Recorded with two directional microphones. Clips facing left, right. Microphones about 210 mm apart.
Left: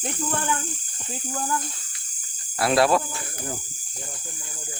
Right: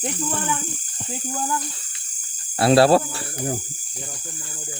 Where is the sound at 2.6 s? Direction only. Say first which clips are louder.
Right 5 dB; 30° right (ahead or behind).